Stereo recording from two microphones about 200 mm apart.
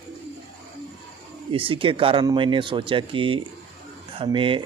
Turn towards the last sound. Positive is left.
turn(degrees=-25)  # may be behind; listen again after turning